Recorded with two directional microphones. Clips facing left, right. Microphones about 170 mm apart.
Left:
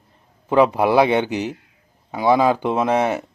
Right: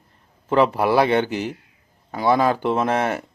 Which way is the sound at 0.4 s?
15° left (ahead or behind).